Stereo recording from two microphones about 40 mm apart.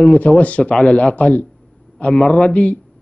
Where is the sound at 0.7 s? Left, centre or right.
Left.